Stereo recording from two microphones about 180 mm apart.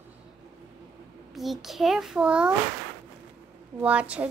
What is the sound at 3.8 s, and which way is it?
Speech, 5° right (ahead or behind).